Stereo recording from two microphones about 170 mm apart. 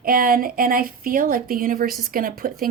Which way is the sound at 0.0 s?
55° right (ahead or behind).